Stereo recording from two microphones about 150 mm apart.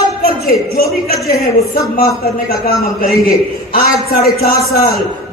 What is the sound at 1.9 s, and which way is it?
Speech, 90° left.